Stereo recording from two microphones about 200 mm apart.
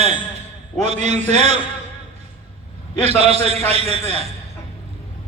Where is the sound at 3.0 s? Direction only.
30° right (ahead or behind).